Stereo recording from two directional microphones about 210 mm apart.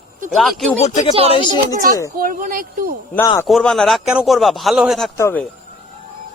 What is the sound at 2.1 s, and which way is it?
Speech, 40° right (ahead or behind).